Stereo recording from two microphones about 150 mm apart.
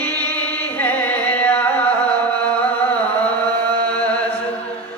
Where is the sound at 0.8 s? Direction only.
10° left (ahead or behind).